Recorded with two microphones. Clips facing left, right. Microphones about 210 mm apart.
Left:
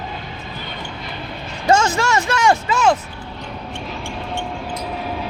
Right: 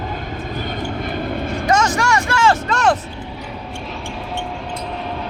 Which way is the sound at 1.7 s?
25° left (ahead or behind).